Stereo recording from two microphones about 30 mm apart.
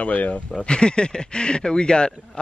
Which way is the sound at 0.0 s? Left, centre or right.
Left.